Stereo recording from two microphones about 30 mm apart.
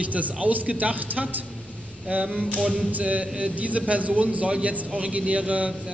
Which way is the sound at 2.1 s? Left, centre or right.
Right.